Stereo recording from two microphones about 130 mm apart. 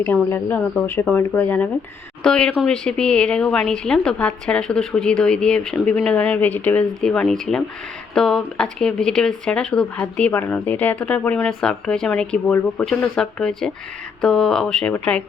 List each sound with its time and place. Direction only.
0.3 s a woman's voice: 15° left (ahead or behind)